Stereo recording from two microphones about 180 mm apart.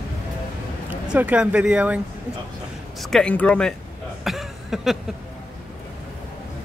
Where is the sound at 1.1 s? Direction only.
5° right (ahead or behind).